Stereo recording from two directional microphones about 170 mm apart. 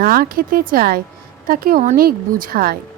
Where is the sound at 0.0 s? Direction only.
60° right (ahead or behind).